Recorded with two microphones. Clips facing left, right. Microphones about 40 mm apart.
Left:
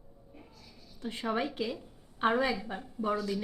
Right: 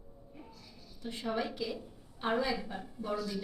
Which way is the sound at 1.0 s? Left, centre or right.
Left.